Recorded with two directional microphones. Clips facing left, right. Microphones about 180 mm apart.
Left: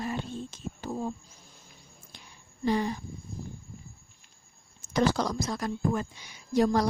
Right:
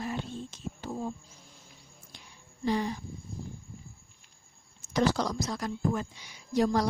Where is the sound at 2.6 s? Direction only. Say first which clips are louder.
Left 2 dB; 50° left (ahead or behind).